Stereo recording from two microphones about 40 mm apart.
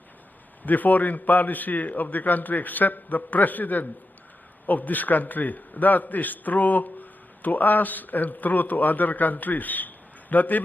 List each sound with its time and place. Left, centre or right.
0.6 s a man's voice: left